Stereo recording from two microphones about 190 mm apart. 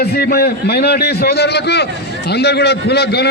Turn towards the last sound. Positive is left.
turn(degrees=60)  # may be behind; listen again after turning